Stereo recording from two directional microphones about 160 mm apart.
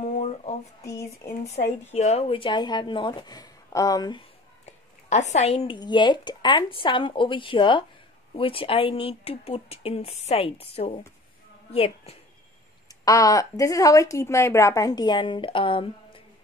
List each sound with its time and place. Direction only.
0.0 s a sound: 45° left (ahead or behind)
0.8 s a woman's voice: 20° left (ahead or behind)
1.5 s speech: 45° left (ahead or behind); by 4.2 s 25° left (ahead or behind)
4.6 s a sound: 45° left (ahead or behind)
5.8 s speech: 30° left (ahead or behind)
13.0 s a woman's voice: 20° left (ahead or behind)